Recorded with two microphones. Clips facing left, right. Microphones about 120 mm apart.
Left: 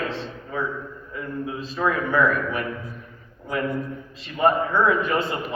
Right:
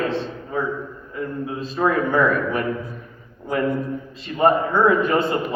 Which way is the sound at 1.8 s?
45° right (ahead or behind).